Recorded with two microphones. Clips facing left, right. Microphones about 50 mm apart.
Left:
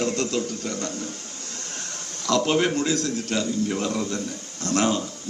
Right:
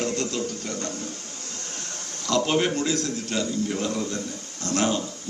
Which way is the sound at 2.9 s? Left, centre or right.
Right.